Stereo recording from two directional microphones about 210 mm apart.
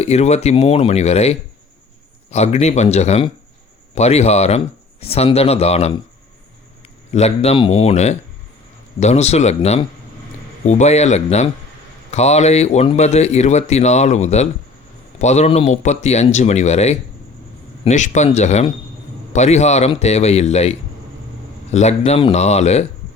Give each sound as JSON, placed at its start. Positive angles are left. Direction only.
{"t": 0.0, "sound": "a man's voice", "side_deg": 30}
{"t": 7.1, "sound": "a man's voice", "side_deg": 30}